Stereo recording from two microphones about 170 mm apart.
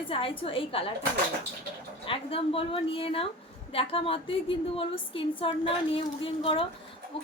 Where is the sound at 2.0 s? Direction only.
35° left (ahead or behind).